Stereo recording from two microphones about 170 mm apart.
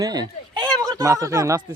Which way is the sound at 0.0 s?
25° right (ahead or behind).